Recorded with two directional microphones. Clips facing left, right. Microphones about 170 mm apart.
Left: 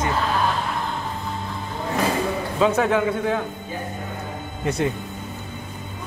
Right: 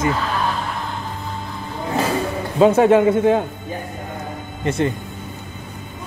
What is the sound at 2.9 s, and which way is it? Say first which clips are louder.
Speech: right 7 dB; 50° right (ahead or behind).